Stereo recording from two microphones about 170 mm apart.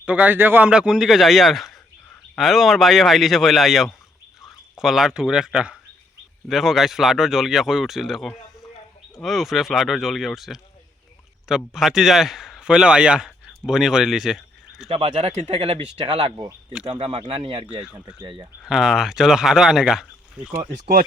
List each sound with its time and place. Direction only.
0.0 s a man's voice: 10° right (ahead or behind)
14.8 s speech: 35° right (ahead or behind)
16.3 s speech: 20° right (ahead or behind)
16.8 s speech: 30° right (ahead or behind)
18.6 s speech: centre (ahead or behind)
20.5 s speech: 50° right (ahead or behind)